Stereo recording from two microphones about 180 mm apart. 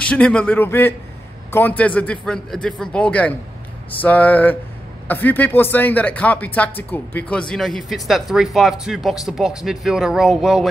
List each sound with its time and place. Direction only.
0.0 s speech: 5° left (ahead or behind)